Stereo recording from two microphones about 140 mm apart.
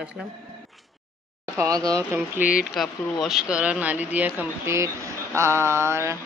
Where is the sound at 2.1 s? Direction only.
15° right (ahead or behind).